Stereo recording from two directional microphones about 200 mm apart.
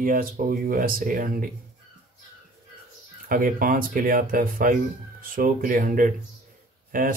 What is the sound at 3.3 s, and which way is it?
Speech, 45° right (ahead or behind).